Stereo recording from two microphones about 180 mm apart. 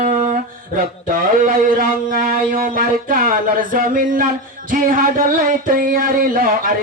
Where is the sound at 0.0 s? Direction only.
45° right (ahead or behind).